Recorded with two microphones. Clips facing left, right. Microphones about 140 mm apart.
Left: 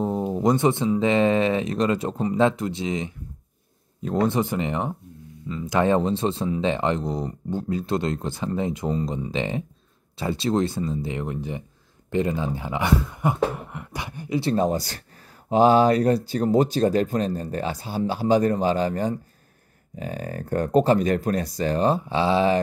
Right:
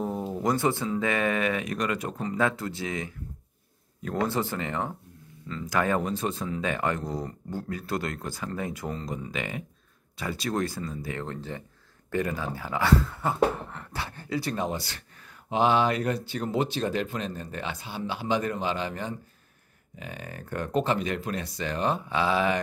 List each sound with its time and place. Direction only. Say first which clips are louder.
0.0 s speech: left 6 dB; 20° left (ahead or behind)
14.4 s speech: left 11 dB; 35° left (ahead or behind)